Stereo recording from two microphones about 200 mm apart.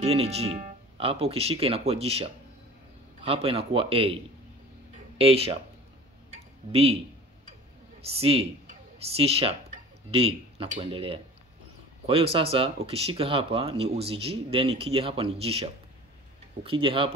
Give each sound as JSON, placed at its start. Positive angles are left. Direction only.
{"t": 0.0, "sound": "speech", "side_deg": -30}
{"t": 6.7, "sound": "speech", "side_deg": -30}
{"t": 8.2, "sound": "speech", "side_deg": -30}